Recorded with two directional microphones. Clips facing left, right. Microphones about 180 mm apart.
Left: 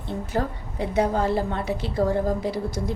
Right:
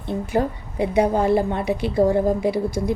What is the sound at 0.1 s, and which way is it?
A woman's voice, 15° right (ahead or behind).